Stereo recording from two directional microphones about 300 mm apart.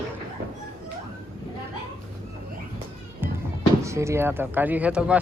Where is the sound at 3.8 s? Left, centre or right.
Centre.